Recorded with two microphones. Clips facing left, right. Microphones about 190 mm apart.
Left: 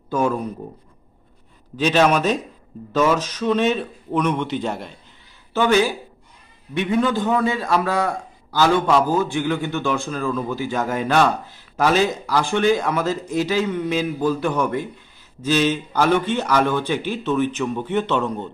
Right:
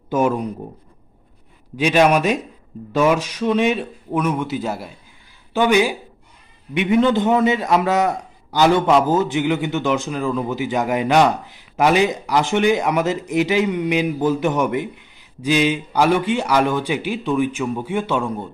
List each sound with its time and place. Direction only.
0.1 s speech: 20° right (ahead or behind)
1.8 s a man's voice: 10° right (ahead or behind)